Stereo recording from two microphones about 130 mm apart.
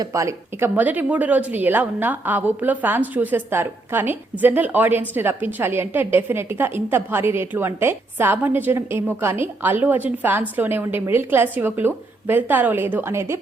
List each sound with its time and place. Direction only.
0.0 s speech: 25° right (ahead or behind)